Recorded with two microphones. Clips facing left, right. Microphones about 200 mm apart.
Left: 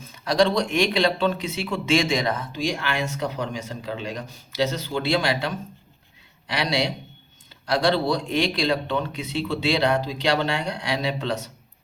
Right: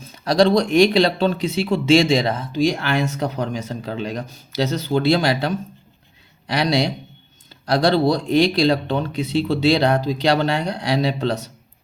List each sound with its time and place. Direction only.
0.1 s speech: 35° right (ahead or behind)